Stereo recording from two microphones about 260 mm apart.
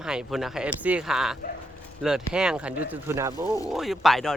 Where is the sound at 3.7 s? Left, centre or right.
Centre.